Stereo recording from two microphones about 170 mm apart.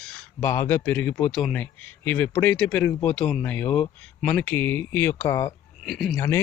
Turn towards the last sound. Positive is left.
turn(degrees=15)  # may be behind; listen again after turning